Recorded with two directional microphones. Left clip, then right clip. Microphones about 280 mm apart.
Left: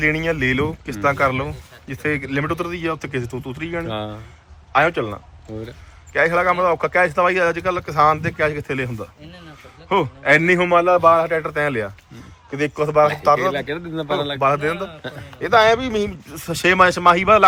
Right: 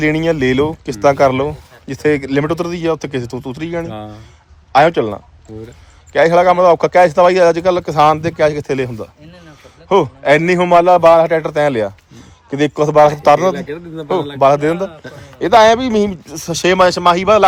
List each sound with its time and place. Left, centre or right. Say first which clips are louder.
0.0 s speech: right 5 dB; centre
4.7 s speech: right 7 dB; centre
13.7 s speech: right 3 dB; centre
14.4 s speech: right 9 dB; centre
16.3 s speech: right 1 dB; centre